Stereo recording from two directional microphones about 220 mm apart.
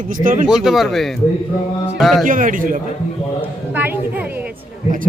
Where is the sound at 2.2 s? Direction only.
35° right (ahead or behind).